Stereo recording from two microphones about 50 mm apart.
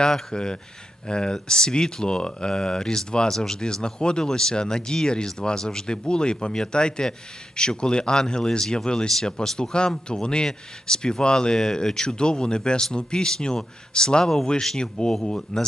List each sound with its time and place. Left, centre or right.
0.0 s speech: centre